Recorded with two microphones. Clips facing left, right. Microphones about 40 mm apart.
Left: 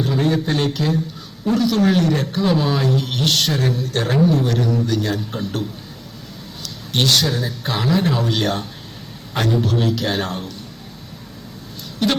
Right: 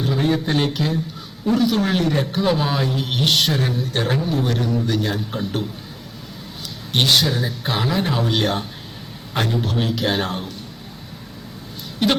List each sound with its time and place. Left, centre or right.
0.0 s a man's voice: centre
6.9 s speech: centre
12.0 s speech: centre